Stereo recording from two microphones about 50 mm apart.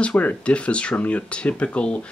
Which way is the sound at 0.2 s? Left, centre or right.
Left.